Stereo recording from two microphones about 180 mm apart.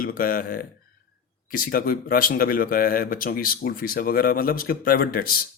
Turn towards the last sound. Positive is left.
turn(degrees=55)  # may be behind; listen again after turning